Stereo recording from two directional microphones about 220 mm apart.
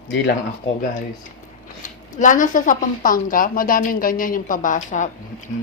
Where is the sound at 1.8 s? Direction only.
35° left (ahead or behind).